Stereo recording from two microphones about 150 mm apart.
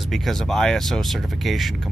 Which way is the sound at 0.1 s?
Centre (ahead or behind).